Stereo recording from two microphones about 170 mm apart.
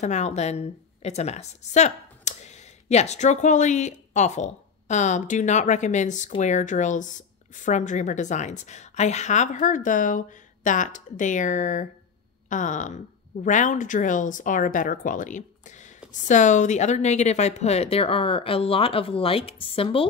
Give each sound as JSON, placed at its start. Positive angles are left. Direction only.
{"t": 0.0, "sound": "a woman's voice", "side_deg": 45}